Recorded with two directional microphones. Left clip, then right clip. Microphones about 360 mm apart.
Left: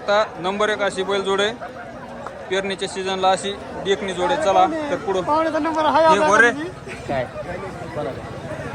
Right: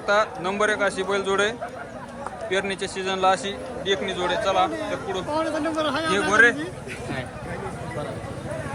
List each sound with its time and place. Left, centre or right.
0.0 s a man's voice: centre